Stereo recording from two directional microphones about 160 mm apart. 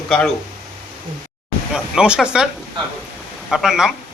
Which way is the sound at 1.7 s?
5° right (ahead or behind).